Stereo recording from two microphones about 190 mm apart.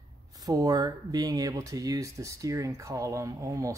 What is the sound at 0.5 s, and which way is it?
Speech, 20° right (ahead or behind).